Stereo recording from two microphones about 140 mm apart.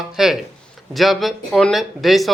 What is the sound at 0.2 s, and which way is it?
Speech, centre (ahead or behind).